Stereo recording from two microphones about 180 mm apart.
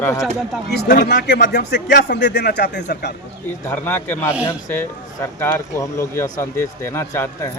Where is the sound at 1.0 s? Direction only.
65° left (ahead or behind).